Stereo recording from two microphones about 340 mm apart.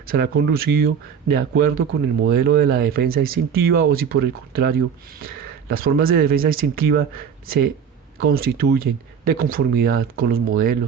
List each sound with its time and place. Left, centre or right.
0.1 s speech: right